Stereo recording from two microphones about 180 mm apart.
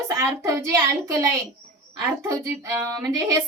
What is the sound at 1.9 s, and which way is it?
A woman's voice, 20° right (ahead or behind).